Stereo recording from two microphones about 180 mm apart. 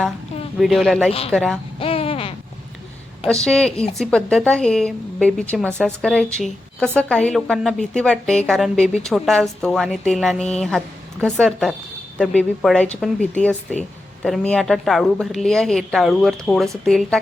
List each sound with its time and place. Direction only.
0.6 s a woman's voice: centre (ahead or behind)
1.8 s a sound: 30° left (ahead or behind)
3.2 s a woman's voice: 5° left (ahead or behind)